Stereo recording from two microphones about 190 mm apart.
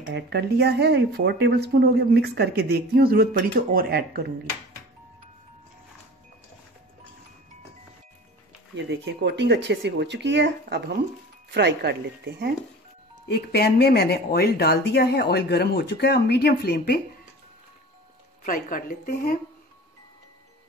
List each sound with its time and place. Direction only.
0.1 s speech: 60° right (ahead or behind)
8.7 s speech: 70° right (ahead or behind)
13.3 s speech: 55° left (ahead or behind)
18.4 s a woman's voice: 45° left (ahead or behind)